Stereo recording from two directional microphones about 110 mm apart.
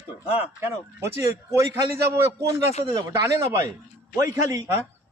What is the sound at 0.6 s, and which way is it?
A man's voice, 25° right (ahead or behind).